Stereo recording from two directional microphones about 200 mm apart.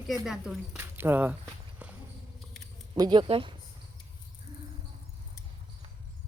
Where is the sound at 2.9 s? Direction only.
20° right (ahead or behind).